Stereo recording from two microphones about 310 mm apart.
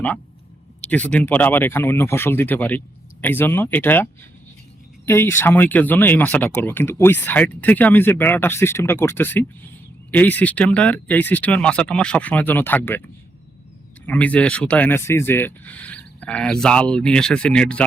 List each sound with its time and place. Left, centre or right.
0.8 s speech: centre
14.1 s speech: centre